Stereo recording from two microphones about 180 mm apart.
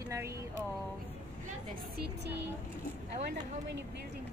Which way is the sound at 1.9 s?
65° right (ahead or behind).